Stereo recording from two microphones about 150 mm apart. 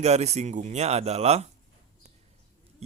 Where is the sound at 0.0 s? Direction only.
45° right (ahead or behind).